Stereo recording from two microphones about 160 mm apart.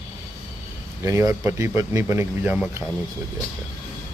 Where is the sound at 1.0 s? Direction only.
20° right (ahead or behind).